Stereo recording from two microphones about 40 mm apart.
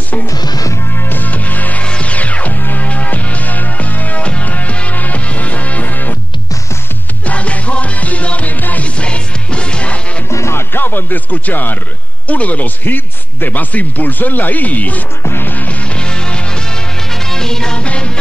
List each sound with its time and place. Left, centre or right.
0.9 s music: left
1.3 s music: left
1.9 s music: left
7.2 s music: left
8.8 s music: left
10.5 s music: left
12.3 s a man's voice: left
15.4 s music: left
15.8 s music: left
17.7 s music: left